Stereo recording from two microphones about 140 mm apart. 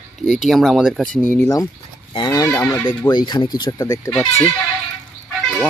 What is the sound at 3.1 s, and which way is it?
Speech, 35° left (ahead or behind).